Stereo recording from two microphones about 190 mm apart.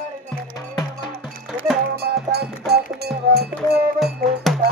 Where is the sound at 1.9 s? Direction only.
55° right (ahead or behind).